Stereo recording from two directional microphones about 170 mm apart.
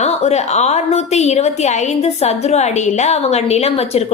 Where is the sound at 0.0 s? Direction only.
40° left (ahead or behind).